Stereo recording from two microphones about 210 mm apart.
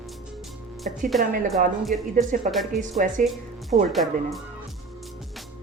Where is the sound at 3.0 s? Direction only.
40° right (ahead or behind).